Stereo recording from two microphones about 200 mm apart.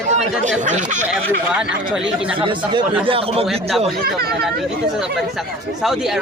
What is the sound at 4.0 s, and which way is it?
Speech, 50° right (ahead or behind).